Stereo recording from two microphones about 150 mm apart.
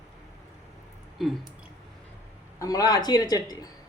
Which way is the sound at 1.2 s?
Centre (ahead or behind).